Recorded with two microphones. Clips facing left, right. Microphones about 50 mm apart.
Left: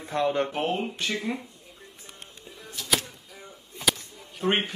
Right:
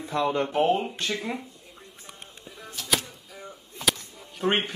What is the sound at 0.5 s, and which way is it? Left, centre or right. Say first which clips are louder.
Speech: right 5 dB; centre.